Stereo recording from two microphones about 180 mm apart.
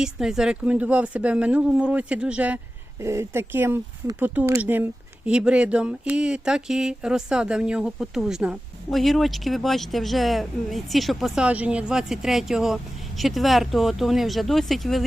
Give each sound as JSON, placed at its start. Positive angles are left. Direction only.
{"t": 0.0, "sound": "speech", "side_deg": -5}